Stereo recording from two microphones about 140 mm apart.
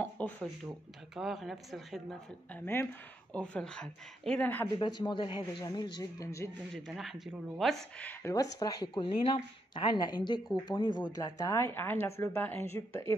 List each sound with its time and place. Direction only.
0.0 s a sound: 10° left (ahead or behind)
1.1 s speech: centre (ahead or behind)
2.5 s speech: 15° left (ahead or behind)
4.7 s a woman's voice: 30° left (ahead or behind)
6.7 s speech: centre (ahead or behind)
8.3 s a woman's voice: 25° left (ahead or behind)